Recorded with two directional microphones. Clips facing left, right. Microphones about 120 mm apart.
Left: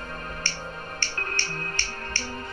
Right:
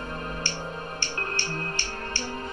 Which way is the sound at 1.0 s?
20° right (ahead or behind).